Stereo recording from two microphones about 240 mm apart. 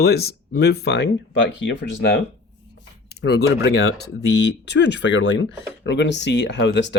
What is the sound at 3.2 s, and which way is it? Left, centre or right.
Speech, left.